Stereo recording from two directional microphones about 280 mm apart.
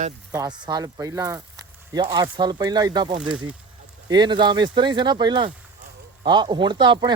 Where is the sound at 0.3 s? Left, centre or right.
Centre.